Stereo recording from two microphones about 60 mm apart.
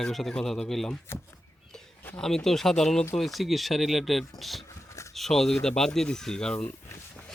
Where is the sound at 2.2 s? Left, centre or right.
Centre.